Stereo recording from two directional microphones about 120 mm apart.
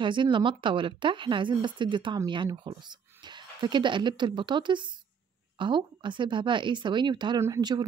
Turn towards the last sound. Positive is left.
turn(degrees=-25)  # may be behind; listen again after turning